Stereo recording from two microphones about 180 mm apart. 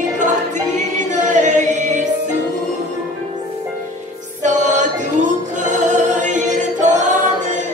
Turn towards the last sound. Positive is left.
turn(degrees=-45)  # may be behind; listen again after turning